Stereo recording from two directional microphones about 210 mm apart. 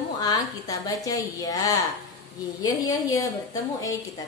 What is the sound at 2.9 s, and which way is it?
Speech, 15° left (ahead or behind).